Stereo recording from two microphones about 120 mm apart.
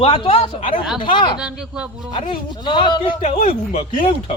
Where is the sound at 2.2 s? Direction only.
45° left (ahead or behind).